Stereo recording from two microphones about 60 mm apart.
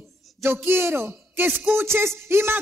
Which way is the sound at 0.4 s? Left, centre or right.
Right.